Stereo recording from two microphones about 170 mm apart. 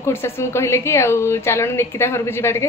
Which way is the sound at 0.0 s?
15° left (ahead or behind).